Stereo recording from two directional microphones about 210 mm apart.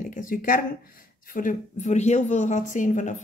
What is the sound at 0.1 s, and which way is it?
A woman's voice, 40° left (ahead or behind).